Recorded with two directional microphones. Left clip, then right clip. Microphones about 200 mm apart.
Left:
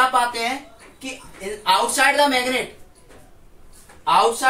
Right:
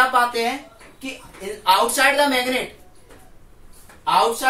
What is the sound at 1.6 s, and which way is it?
Speech, 10° right (ahead or behind).